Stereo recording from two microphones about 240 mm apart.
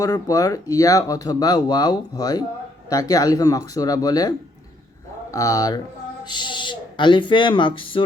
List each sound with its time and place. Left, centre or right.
0.0 s speech: centre